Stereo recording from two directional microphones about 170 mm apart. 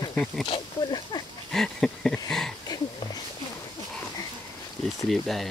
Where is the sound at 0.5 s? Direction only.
25° left (ahead or behind).